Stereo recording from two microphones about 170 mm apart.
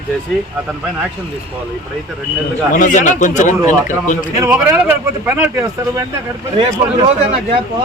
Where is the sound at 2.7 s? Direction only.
50° left (ahead or behind).